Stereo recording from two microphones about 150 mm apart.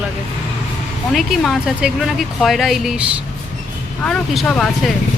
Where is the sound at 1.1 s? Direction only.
Centre (ahead or behind).